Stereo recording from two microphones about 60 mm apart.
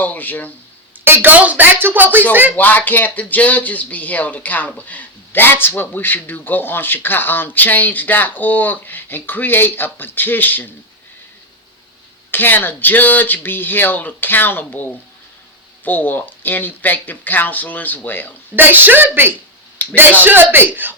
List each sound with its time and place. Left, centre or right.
0.0 s speech: left
1.0 s a woman's voice: right
2.6 s speech: left
12.3 s speech: left
18.5 s a woman's voice: right